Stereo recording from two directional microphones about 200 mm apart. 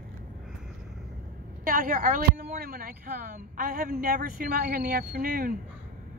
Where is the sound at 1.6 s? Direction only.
45° right (ahead or behind).